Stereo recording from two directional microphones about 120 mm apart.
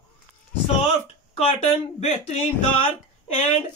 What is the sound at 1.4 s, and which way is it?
Speech, 60° left (ahead or behind).